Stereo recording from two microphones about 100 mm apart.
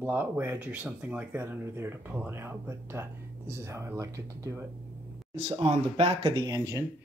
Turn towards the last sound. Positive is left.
turn(degrees=-35)  # may be behind; listen again after turning